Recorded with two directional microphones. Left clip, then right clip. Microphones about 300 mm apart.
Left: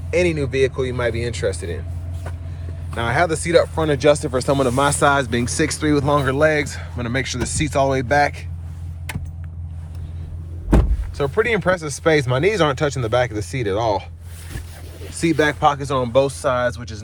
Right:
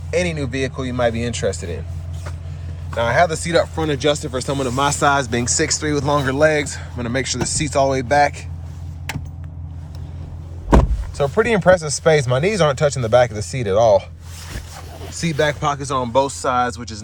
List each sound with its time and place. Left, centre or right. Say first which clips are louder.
0.1 s speech: left 2 dB; centre
2.9 s speech: right 3 dB; centre
11.2 s speech: right 2 dB; centre
15.1 s speech: left 1 dB; centre